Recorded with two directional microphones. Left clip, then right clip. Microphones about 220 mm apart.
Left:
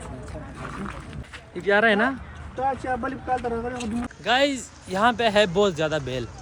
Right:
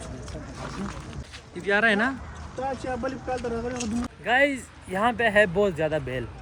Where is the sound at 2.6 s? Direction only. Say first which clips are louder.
Left 4 dB; 15° left (ahead or behind).